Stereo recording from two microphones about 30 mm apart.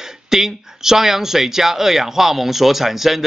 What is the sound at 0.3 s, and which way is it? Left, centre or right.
Speech, centre.